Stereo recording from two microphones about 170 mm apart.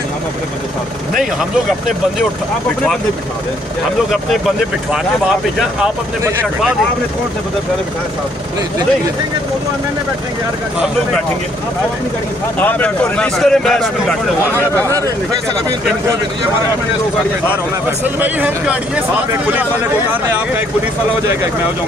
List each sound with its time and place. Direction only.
12.5 s speech: 10° left (ahead or behind)
14.8 s speech: 20° right (ahead or behind)
18.0 s speech: 10° right (ahead or behind)